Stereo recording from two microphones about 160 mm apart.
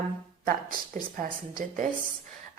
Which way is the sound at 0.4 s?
60° right (ahead or behind).